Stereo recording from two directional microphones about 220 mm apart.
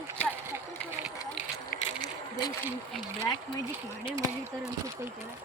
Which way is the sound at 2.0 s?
20° left (ahead or behind).